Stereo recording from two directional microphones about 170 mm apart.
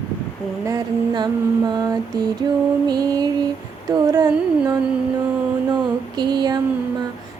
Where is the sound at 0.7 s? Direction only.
25° right (ahead or behind).